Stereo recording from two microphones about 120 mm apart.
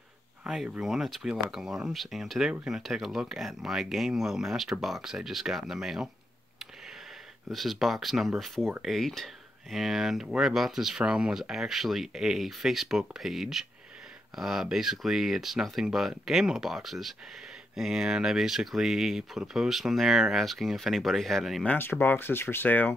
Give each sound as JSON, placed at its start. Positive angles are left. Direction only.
{"t": 0.4, "sound": "speech", "side_deg": -5}
{"t": 7.5, "sound": "speech", "side_deg": 0}
{"t": 21.7, "sound": "speech", "side_deg": 15}